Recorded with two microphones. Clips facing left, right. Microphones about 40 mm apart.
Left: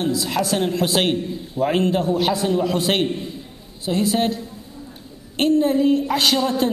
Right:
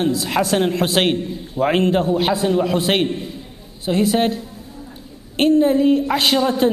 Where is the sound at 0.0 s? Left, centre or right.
Right.